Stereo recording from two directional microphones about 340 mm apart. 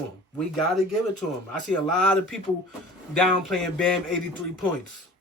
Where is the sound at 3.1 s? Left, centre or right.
Centre.